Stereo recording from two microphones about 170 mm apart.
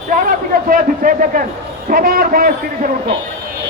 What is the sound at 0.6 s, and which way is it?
Speech, 55° right (ahead or behind).